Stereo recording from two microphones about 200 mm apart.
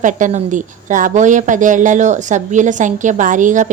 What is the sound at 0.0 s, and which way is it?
A woman's voice, 40° right (ahead or behind).